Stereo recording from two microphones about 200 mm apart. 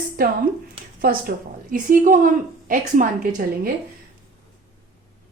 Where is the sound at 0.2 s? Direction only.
45° right (ahead or behind).